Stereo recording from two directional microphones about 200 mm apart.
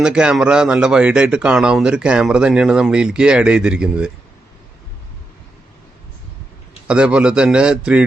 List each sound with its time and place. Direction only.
0.0 s speech: 5° right (ahead or behind)
6.8 s speech: 5° right (ahead or behind)